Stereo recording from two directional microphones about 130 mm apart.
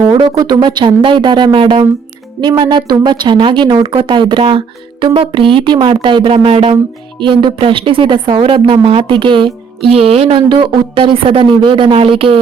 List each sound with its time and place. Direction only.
0.1 s a woman's voice: 30° right (ahead or behind)